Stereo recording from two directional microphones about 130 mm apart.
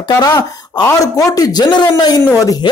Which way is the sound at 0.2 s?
30° left (ahead or behind).